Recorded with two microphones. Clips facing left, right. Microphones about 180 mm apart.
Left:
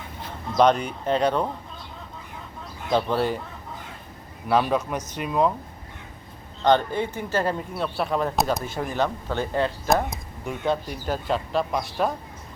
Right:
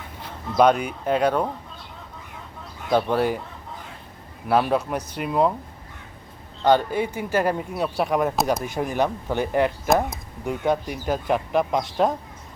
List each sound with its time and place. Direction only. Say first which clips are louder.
0.5 s speech: right 1 dB; 10° right (ahead or behind)
2.9 s speech: right 2 dB; 10° right (ahead or behind)
4.4 s speech: right 1 dB; 10° right (ahead or behind)
6.7 s speech: right 1 dB; 10° right (ahead or behind)